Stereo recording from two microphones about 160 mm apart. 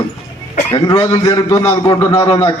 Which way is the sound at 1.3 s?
20° left (ahead or behind).